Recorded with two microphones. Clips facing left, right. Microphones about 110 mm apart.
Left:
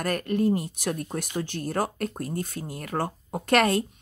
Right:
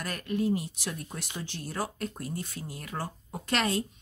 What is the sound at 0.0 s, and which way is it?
Speech, 55° left (ahead or behind).